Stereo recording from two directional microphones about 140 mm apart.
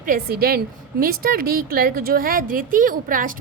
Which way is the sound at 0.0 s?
90° right.